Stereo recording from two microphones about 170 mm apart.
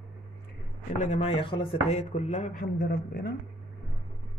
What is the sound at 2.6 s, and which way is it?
Speech, 65° left (ahead or behind).